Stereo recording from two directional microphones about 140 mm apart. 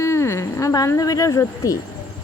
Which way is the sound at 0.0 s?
20° left (ahead or behind).